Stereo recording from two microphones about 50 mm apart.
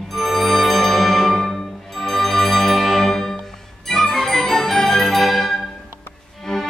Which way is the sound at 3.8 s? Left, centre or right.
Centre.